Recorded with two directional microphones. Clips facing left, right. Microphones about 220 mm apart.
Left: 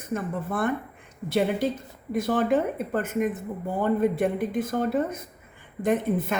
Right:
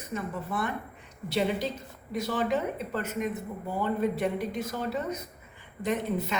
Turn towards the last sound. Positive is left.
turn(degrees=50)  # may be behind; listen again after turning